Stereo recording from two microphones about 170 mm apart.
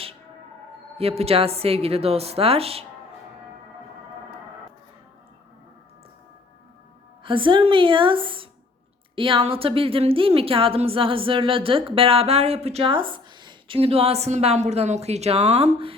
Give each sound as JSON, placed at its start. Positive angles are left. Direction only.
{"t": 0.9, "sound": "a woman's voice", "side_deg": -35}
{"t": 7.3, "sound": "a woman's voice", "side_deg": -30}